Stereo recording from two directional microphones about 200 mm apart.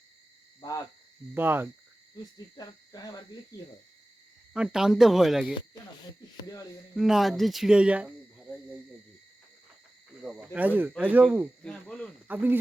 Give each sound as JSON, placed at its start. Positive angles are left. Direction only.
{"t": 1.3, "sound": "speech", "side_deg": -10}
{"t": 2.6, "sound": "cricket", "side_deg": 20}
{"t": 4.5, "sound": "speech", "side_deg": -5}
{"t": 6.9, "sound": "speech", "side_deg": 0}
{"t": 10.2, "sound": "speech", "side_deg": -5}
{"t": 11.6, "sound": "speech", "side_deg": 5}
{"t": 12.3, "sound": "speech", "side_deg": -10}